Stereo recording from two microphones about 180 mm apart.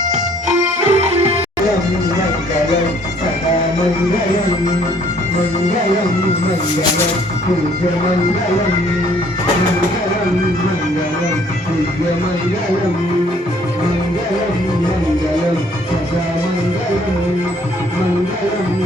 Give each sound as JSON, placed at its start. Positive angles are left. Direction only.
{"t": 0.9, "sound": "music", "side_deg": -35}